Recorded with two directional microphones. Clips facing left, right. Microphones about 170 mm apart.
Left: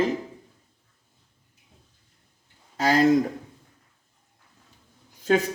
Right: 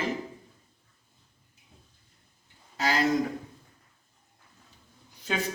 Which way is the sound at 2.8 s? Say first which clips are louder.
Left 7 dB; 45° left (ahead or behind).